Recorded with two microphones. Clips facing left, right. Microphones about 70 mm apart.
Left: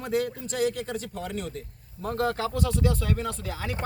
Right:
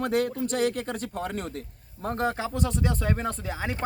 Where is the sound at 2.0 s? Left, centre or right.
Right.